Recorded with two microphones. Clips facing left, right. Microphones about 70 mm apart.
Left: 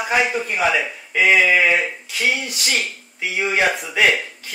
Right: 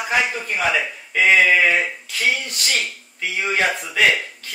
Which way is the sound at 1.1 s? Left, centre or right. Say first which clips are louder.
Even; centre.